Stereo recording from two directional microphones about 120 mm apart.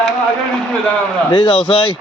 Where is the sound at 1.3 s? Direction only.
50° left (ahead or behind).